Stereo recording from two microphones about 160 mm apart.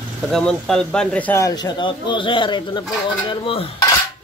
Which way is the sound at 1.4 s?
25° left (ahead or behind).